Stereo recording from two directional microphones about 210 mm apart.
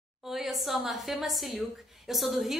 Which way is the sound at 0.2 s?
Centre (ahead or behind).